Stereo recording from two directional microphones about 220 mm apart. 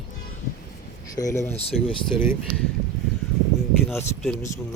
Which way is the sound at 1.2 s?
15° left (ahead or behind).